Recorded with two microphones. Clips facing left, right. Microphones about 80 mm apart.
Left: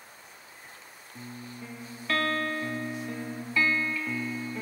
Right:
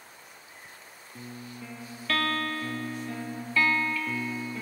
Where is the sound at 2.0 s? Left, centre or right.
Left.